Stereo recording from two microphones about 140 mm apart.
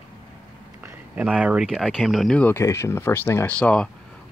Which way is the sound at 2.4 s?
20° left (ahead or behind).